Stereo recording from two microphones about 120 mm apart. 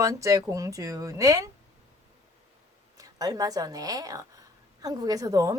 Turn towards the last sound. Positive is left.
turn(degrees=-30)  # may be behind; listen again after turning